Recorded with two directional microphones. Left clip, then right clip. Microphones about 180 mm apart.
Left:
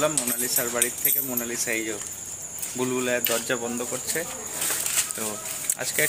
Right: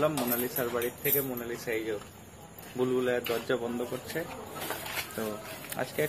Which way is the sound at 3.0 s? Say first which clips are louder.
Left 4 dB; 15° left (ahead or behind).